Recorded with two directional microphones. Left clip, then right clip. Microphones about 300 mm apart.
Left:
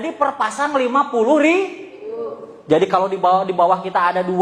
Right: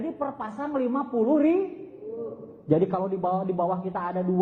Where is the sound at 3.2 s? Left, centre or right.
Left.